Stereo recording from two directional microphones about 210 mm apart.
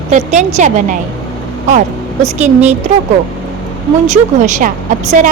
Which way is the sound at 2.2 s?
30° right (ahead or behind).